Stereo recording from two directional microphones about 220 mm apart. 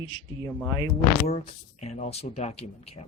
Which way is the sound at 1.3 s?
30° left (ahead or behind).